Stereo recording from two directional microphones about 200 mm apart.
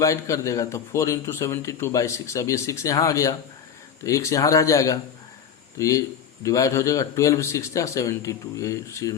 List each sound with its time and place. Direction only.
0.0 s a man's voice: 15° left (ahead or behind)